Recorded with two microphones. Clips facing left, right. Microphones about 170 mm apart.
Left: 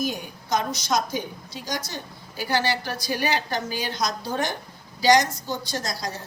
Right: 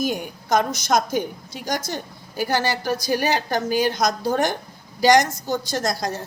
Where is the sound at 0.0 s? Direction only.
50° right (ahead or behind).